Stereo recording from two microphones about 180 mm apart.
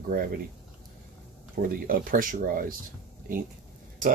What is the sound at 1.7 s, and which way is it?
Speech, 50° right (ahead or behind).